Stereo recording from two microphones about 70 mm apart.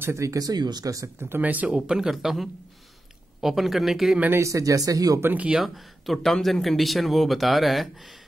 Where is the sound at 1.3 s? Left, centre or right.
Right.